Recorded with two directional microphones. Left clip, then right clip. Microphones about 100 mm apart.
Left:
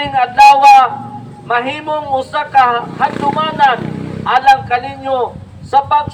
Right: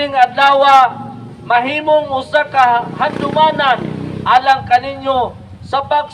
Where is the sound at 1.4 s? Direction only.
20° right (ahead or behind).